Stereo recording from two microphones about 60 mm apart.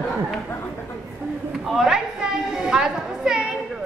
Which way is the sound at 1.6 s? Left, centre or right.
Centre.